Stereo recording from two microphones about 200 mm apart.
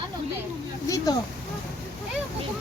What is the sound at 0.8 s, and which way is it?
Speech, 15° left (ahead or behind).